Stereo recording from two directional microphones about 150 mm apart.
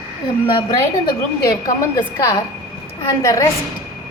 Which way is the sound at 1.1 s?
25° left (ahead or behind).